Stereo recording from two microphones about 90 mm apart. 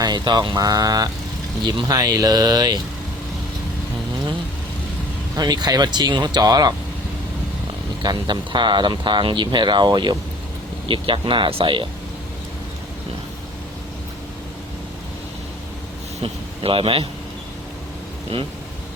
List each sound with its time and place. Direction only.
0.0 s speech: 50° right (ahead or behind)
5.4 s speech: 50° right (ahead or behind)
8.0 s speech: 55° right (ahead or behind)
10.8 s speech: 70° right (ahead or behind)
16.2 s a man's voice: 90° right